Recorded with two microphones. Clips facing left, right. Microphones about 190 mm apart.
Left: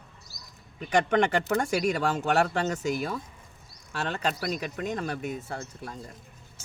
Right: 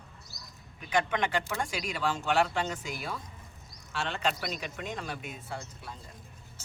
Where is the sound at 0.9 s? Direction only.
50° left (ahead or behind).